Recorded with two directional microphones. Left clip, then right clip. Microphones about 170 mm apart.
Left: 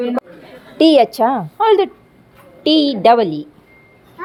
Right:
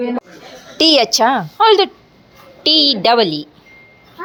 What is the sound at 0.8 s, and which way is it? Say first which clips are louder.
A woman's voice: left 1 dB; 15° left (ahead or behind).